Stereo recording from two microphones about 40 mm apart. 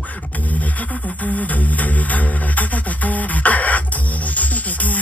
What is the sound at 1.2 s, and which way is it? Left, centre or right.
Music, left.